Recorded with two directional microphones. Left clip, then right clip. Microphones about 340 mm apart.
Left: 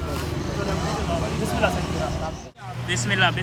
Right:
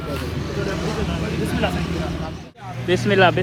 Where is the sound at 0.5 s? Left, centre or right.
Left.